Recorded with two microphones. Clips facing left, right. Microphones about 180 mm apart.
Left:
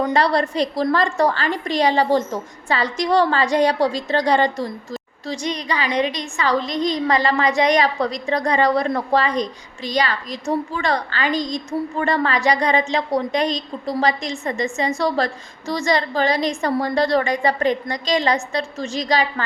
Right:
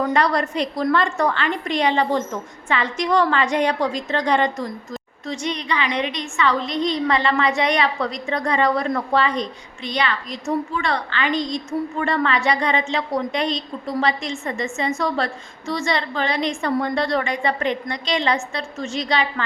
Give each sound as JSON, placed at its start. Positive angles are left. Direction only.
{"t": 0.1, "sound": "a woman's voice", "side_deg": 30}